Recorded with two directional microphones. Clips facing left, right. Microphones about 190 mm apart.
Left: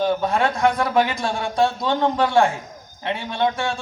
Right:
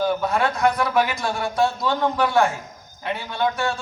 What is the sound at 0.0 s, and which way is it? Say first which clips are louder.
A man's voice: left 1 dB; 20° left (ahead or behind).